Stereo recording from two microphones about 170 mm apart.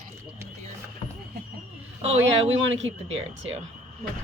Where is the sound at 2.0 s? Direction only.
40° right (ahead or behind).